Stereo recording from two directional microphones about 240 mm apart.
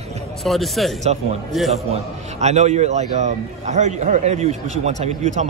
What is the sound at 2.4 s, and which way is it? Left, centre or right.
A man's voice, right.